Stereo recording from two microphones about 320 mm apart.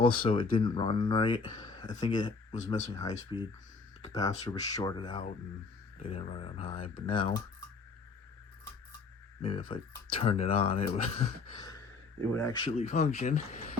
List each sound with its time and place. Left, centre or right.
0.2 s speech: centre
9.4 s speech: centre